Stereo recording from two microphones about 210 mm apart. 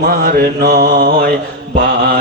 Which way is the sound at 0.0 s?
45° right (ahead or behind).